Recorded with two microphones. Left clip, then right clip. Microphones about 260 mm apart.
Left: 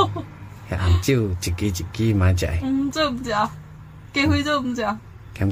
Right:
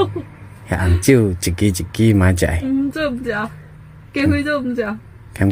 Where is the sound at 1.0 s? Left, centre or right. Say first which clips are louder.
Right 9 dB; centre.